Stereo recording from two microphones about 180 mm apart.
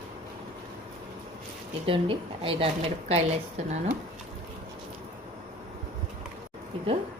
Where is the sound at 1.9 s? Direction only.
30° right (ahead or behind).